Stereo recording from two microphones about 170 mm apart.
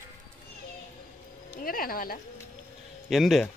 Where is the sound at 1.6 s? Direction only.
60° left (ahead or behind).